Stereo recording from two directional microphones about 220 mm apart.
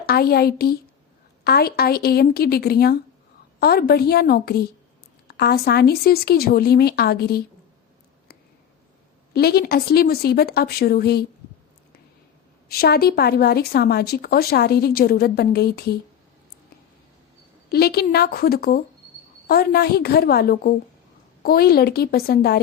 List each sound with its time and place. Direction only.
0.1 s a woman's voice: 45° left (ahead or behind)
9.3 s a woman's voice: 45° left (ahead or behind)
12.6 s a woman's voice: 45° left (ahead or behind)
17.7 s a woman's voice: 45° left (ahead or behind)